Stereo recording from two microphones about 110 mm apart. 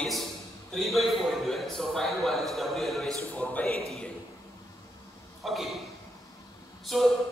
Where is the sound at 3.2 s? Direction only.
15° left (ahead or behind).